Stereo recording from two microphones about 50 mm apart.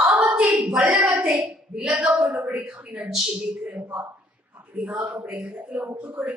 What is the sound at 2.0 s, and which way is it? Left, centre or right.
A woman's voice, right.